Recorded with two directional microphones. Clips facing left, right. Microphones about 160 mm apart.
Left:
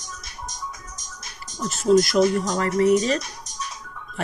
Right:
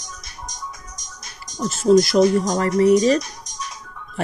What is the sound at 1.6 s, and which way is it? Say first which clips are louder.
Speech: right 3 dB; 35° right (ahead or behind).